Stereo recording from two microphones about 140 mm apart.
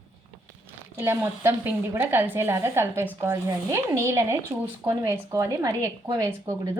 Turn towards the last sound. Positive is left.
turn(degrees=-25)  # may be behind; listen again after turning